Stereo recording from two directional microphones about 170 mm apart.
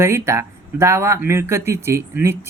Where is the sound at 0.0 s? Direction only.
15° right (ahead or behind).